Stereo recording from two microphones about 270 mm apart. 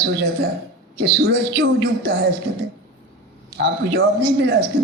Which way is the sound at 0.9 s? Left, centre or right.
Right.